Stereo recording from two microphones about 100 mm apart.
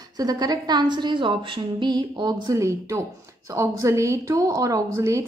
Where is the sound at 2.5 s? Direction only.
30° right (ahead or behind).